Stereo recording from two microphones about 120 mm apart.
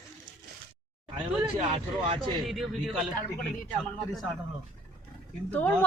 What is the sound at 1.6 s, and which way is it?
Speech, 55° right (ahead or behind).